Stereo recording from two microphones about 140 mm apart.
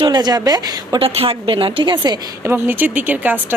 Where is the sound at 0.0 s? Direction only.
30° right (ahead or behind).